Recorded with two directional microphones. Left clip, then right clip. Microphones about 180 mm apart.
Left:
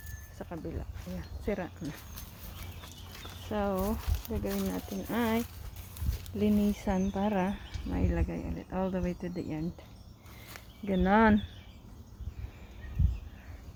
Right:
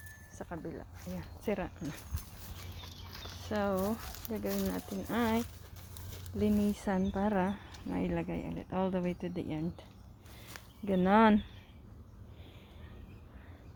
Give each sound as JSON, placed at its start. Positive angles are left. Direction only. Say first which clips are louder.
{"t": 0.3, "sound": "speech", "louder": "left 2 dB", "side_deg": 5}
{"t": 1.1, "sound": "speech", "louder": "left 1 dB", "side_deg": -10}
{"t": 3.5, "sound": "speech", "louder": "left 1 dB", "side_deg": -5}
{"t": 4.4, "sound": "speech", "louder": "left 1 dB", "side_deg": -55}
{"t": 4.9, "sound": "speech", "louder": "left 1 dB", "side_deg": 0}
{"t": 10.8, "sound": "speech", "louder": "left 1 dB", "side_deg": 0}